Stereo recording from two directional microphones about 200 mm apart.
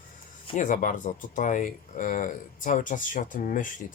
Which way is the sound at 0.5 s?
40° left (ahead or behind).